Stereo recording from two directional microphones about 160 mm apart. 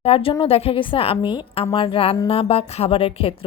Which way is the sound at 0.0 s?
35° left (ahead or behind).